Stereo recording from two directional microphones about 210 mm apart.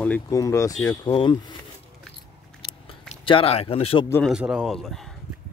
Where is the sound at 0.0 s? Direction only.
10° left (ahead or behind).